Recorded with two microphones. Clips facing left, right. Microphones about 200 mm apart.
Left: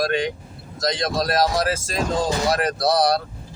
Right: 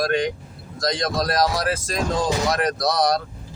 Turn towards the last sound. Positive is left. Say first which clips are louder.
# left 1 dB
turn(degrees=30)  # may be behind; listen again after turning